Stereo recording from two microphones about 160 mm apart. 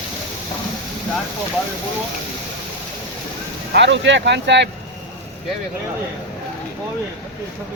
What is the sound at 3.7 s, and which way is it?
Speech, 90° right.